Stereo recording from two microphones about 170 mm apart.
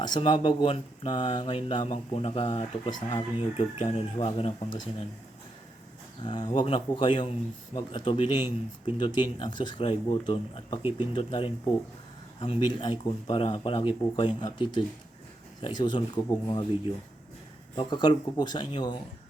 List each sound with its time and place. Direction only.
0.0 s speech: 30° left (ahead or behind)
6.2 s speech: 25° left (ahead or behind)
17.7 s speech: 25° left (ahead or behind)